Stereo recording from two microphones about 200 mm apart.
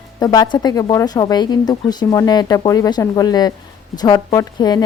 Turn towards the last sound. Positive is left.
turn(degrees=20)  # may be behind; listen again after turning